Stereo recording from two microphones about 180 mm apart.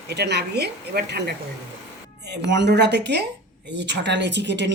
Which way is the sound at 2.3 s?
75° right (ahead or behind).